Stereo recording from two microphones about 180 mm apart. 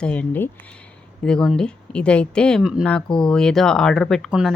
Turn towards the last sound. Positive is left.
turn(degrees=0)  # may be behind; listen again after turning